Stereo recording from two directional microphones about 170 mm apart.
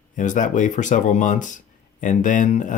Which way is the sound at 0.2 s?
50° left (ahead or behind).